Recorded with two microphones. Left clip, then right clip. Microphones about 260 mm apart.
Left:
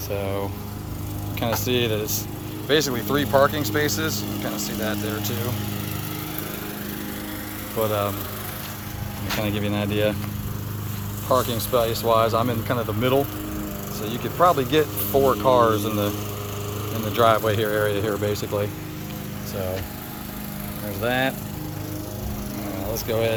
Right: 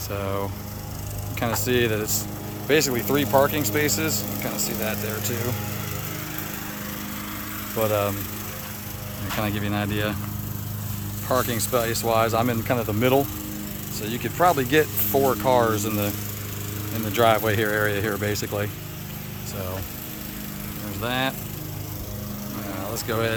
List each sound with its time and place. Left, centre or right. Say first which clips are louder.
0.1 s speech: left 1 dB; centre
7.8 s speech: even; centre
9.4 s speech: even; centre
11.3 s speech: left 2 dB; centre
21.0 s speech: left 3 dB; centre
23.0 s speech: left 2 dB; centre